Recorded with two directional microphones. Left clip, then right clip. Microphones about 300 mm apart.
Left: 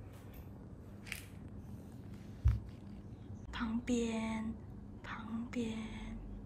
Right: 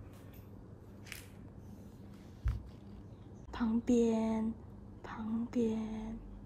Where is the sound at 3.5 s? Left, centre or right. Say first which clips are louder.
Right 6 dB; centre.